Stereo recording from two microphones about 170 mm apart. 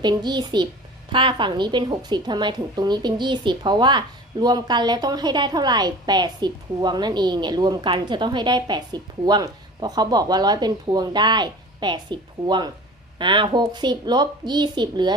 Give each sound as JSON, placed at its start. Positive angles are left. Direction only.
{"t": 0.0, "sound": "a woman's voice", "side_deg": -25}